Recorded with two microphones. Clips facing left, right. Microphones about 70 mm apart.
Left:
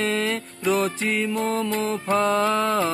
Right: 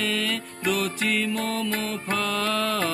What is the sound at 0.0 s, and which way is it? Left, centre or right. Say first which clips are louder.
Music: left 3 dB; left.